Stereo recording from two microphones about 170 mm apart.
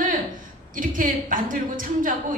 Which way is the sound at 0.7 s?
50° right (ahead or behind).